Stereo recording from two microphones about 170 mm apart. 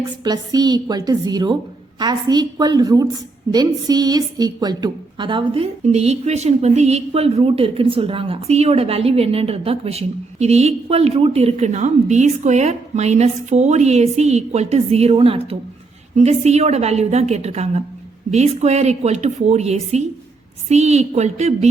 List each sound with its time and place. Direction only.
0.3 s a woman's voice: 25° right (ahead or behind); by 21.7 s 40° right (ahead or behind)